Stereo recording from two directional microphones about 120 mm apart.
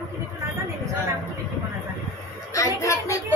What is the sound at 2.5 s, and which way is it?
Speech, 25° left (ahead or behind).